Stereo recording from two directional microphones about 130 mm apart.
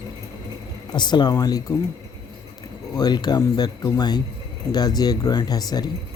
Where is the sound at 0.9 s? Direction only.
35° left (ahead or behind).